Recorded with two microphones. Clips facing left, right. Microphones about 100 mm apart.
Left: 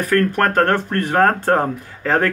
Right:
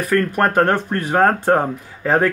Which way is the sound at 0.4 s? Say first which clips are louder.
Even; 15° right (ahead or behind).